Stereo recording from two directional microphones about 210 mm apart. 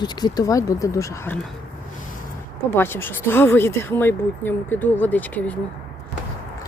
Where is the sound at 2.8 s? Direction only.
10° left (ahead or behind).